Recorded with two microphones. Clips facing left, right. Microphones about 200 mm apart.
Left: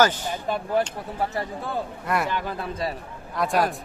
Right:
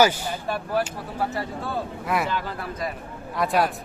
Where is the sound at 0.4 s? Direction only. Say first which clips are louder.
Left 2 dB; 20° left (ahead or behind).